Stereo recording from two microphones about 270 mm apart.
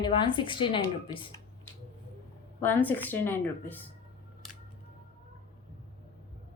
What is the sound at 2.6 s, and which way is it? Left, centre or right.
A woman's voice, centre.